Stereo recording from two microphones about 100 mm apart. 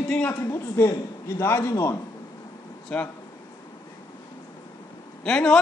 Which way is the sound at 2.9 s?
10° left (ahead or behind).